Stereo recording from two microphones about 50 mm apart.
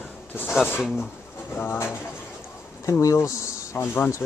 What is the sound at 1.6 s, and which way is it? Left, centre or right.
Speech, left.